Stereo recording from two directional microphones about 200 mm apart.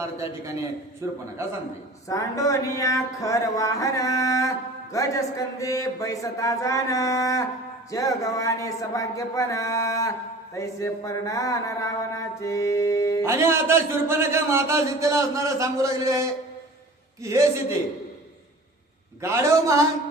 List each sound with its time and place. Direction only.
0.0 s a man's voice: 15° right (ahead or behind)
2.0 s speech: 15° left (ahead or behind)
13.2 s a man's voice: 15° right (ahead or behind)
19.2 s a man's voice: 15° right (ahead or behind)